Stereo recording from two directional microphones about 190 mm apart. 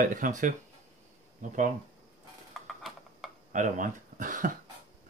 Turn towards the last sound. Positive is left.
turn(degrees=-45)  # may be behind; listen again after turning